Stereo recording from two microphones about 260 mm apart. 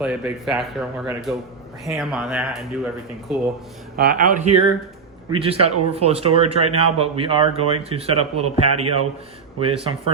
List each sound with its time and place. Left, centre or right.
0.0 s speech: centre
3.9 s a man's voice: right
5.3 s speech: right